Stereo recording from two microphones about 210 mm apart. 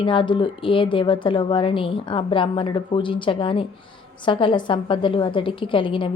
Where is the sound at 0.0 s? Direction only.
25° left (ahead or behind).